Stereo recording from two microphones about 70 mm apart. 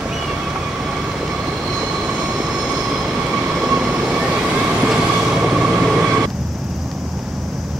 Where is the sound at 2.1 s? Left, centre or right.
Centre.